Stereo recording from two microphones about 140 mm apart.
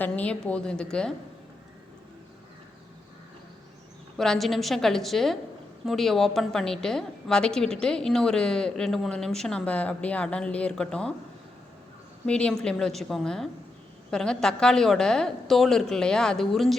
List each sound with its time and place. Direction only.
0.0 s a woman's voice: 10° left (ahead or behind)
4.2 s a woman's voice: centre (ahead or behind)
12.2 s a woman's voice: 5° left (ahead or behind)